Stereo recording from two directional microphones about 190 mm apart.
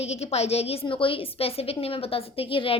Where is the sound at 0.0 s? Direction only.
35° left (ahead or behind).